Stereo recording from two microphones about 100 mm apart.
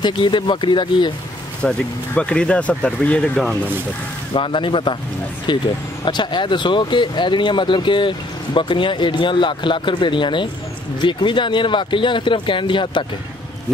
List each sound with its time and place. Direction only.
0.0 s speech: 50° left (ahead or behind)
1.6 s speech: 10° left (ahead or behind)
4.3 s speech: 60° left (ahead or behind)